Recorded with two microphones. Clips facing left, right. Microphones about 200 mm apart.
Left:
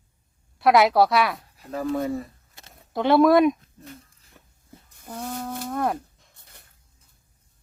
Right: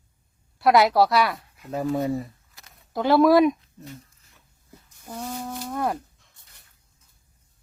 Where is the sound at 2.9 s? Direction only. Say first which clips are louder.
Even; centre (ahead or behind).